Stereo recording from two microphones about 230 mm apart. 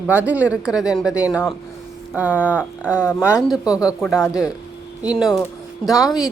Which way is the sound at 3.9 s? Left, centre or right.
Centre.